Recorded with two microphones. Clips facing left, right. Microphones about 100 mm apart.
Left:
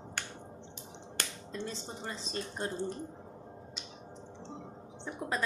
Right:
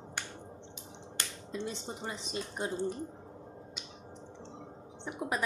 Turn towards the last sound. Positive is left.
turn(degrees=-15)  # may be behind; listen again after turning